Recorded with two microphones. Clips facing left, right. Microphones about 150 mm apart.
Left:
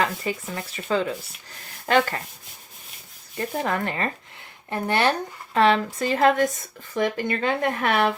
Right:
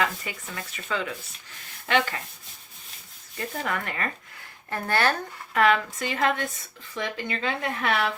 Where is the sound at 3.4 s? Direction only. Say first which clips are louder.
Left 5 dB; 30° left (ahead or behind).